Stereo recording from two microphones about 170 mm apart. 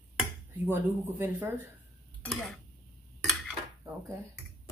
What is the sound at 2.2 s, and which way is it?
Speech, centre (ahead or behind).